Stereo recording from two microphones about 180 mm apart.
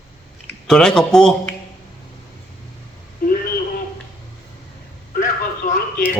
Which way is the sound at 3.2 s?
55° left (ahead or behind).